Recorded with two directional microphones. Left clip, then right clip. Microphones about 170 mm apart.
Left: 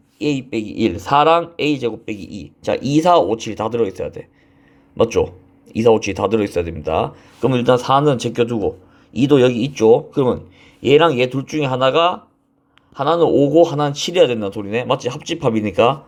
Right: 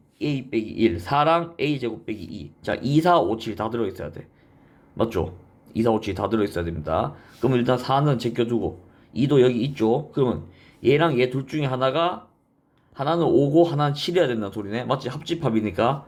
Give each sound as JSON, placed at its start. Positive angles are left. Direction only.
{"t": 0.2, "sound": "speech", "side_deg": 40}